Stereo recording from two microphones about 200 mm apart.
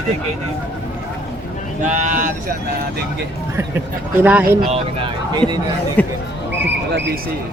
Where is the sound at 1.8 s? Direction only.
40° right (ahead or behind).